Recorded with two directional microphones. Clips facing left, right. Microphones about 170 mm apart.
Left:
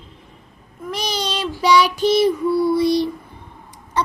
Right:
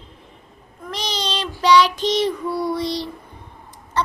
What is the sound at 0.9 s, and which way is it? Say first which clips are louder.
Child singing: left 2 dB; 10° left (ahead or behind).